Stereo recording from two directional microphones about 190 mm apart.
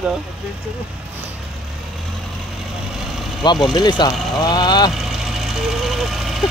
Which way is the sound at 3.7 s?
20° left (ahead or behind).